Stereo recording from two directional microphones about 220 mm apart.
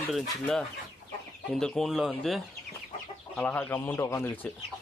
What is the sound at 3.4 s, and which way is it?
Speech, 5° left (ahead or behind).